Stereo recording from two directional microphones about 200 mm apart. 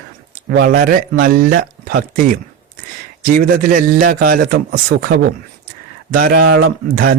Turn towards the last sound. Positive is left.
turn(degrees=-50)  # may be behind; listen again after turning